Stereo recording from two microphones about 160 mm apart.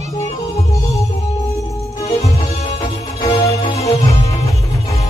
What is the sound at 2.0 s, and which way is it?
Music, 45° left (ahead or behind).